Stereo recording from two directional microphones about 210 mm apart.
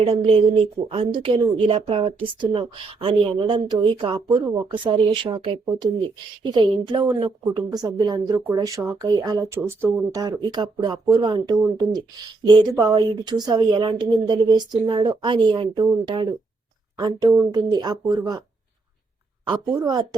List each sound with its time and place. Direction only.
0.0 s speech: 25° right (ahead or behind)
19.5 s speech: 15° right (ahead or behind)